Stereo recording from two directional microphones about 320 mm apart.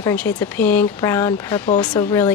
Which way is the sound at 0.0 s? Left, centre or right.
Centre.